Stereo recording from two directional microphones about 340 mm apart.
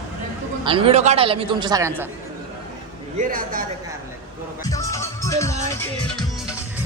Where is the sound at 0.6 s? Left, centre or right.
Centre.